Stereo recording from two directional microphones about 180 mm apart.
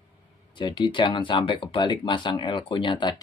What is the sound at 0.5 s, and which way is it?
Speech, 25° left (ahead or behind).